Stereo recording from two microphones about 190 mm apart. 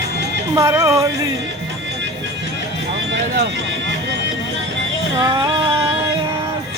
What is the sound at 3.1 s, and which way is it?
Speech, 60° right (ahead or behind).